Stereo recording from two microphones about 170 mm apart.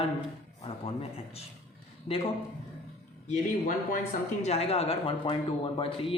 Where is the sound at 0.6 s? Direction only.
35° left (ahead or behind).